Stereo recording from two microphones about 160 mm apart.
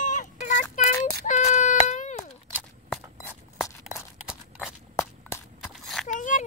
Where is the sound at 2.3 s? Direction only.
Centre (ahead or behind).